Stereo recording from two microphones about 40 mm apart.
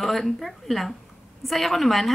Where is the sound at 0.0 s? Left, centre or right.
Centre.